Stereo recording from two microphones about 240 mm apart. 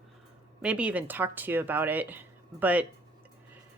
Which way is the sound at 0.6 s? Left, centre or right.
Centre.